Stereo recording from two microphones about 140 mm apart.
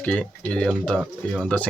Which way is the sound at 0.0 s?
10° left (ahead or behind).